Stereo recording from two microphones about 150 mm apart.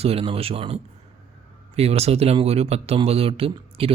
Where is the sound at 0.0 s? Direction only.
40° right (ahead or behind).